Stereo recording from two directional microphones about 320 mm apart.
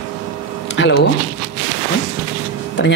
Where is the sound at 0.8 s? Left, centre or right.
Left.